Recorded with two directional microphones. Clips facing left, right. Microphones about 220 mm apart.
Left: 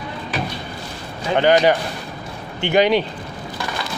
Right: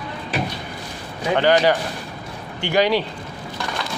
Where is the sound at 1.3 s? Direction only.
15° left (ahead or behind).